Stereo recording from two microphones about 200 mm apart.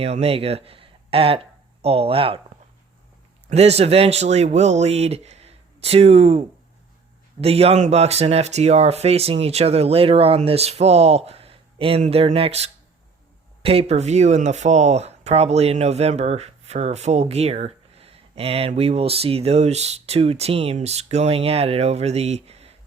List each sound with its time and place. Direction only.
0.0 s speech: 30° right (ahead or behind)
3.5 s speech: 30° right (ahead or behind)
7.4 s speech: 30° right (ahead or behind)